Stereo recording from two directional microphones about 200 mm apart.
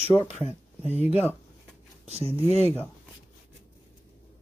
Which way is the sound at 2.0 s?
30° right (ahead or behind).